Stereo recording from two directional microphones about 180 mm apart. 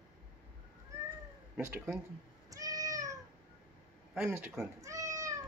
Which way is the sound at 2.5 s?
20° right (ahead or behind).